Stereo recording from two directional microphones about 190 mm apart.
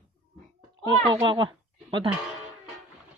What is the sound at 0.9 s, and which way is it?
Speech, 20° right (ahead or behind).